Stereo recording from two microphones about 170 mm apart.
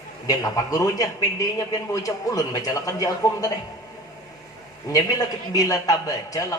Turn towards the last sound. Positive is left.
turn(degrees=20)  # may be behind; listen again after turning